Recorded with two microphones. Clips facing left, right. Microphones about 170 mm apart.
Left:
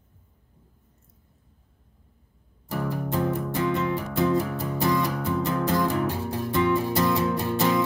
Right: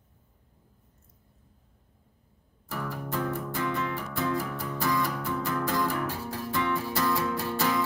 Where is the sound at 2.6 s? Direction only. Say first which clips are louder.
Left 6 dB; 25° left (ahead or behind).